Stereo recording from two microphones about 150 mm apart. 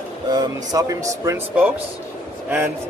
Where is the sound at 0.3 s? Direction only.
25° right (ahead or behind).